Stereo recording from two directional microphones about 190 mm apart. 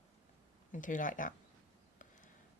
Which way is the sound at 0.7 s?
40° left (ahead or behind).